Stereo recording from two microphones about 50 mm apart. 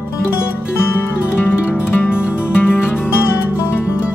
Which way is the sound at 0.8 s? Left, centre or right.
Left.